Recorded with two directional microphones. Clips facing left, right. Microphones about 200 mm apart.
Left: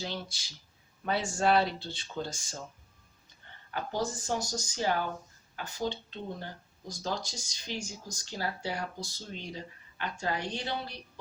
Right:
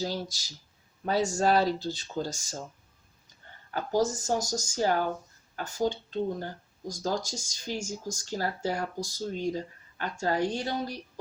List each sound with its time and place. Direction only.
0.0 s speech: 40° right (ahead or behind)
3.7 s speech: 40° right (ahead or behind)